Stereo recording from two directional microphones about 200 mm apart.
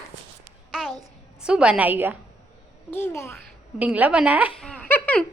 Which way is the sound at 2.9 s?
10° left (ahead or behind).